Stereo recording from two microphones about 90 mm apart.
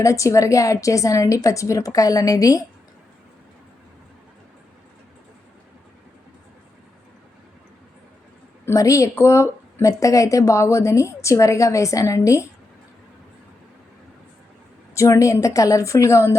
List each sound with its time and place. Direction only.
0.0 s speech: 35° left (ahead or behind)
8.6 s speech: 35° left (ahead or behind)
14.9 s speech: 35° left (ahead or behind)